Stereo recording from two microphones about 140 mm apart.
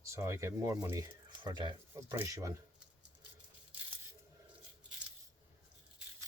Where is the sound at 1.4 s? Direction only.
35° right (ahead or behind).